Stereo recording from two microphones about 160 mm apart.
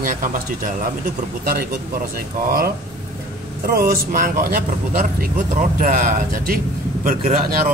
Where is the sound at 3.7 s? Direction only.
65° right (ahead or behind).